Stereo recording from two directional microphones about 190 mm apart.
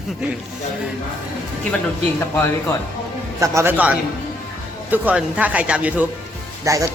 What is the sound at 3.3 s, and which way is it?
Speech, 15° right (ahead or behind).